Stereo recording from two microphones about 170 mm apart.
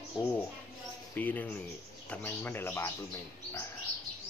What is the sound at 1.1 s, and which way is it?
Speech, 10° left (ahead or behind).